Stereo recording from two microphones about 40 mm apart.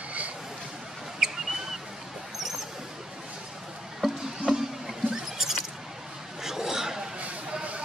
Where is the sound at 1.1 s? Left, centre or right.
Centre.